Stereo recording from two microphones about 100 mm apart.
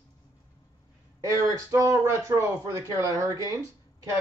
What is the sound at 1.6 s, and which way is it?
Speech, 35° right (ahead or behind).